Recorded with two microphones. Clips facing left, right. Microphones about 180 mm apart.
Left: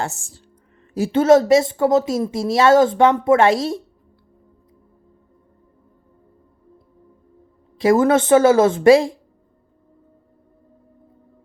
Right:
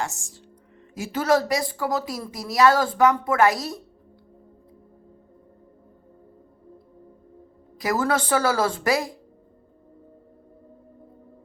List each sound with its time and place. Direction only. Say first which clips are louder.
0.1 s speech: left 2 dB; centre (ahead or behind)
0.9 s a woman's voice: left 8 dB; 30° left (ahead or behind)
7.8 s a woman's voice: left 9 dB; 25° left (ahead or behind)